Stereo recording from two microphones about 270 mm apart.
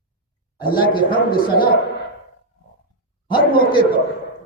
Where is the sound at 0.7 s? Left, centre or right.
Centre.